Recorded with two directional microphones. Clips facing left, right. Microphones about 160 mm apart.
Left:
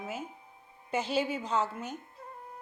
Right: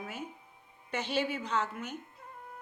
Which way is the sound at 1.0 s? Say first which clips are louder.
Left 2 dB; 30° left (ahead or behind).